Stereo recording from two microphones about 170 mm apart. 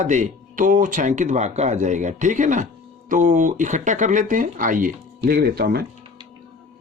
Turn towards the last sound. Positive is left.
turn(degrees=-65)  # may be behind; listen again after turning